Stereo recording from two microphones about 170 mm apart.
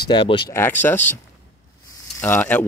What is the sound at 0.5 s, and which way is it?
Speech, 10° left (ahead or behind).